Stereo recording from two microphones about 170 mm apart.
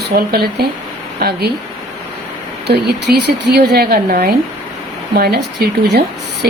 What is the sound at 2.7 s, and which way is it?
A woman's voice, 75° right (ahead or behind).